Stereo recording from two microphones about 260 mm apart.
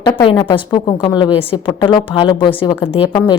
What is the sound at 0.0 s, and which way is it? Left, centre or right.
A woman's voice, centre.